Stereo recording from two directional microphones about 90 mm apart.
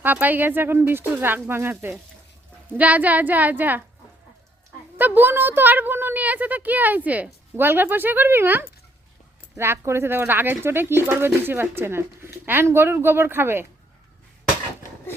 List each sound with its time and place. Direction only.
0.0 s a woman's voice: 20° right (ahead or behind)
4.9 s speech: 20° right (ahead or behind)